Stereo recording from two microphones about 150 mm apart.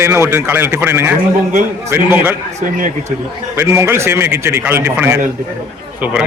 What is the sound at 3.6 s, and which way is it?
Speech, 15° right (ahead or behind).